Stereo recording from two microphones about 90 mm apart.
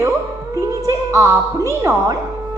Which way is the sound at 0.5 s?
35° right (ahead or behind).